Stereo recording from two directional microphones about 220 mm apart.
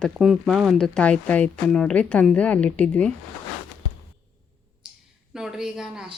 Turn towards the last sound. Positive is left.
turn(degrees=-5)  # may be behind; listen again after turning